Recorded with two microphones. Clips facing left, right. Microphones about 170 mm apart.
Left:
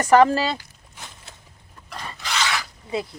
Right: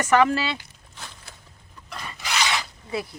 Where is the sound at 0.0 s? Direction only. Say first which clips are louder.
Left 4 dB; 35° left (ahead or behind).